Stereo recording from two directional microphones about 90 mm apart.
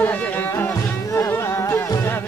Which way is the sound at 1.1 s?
25° left (ahead or behind).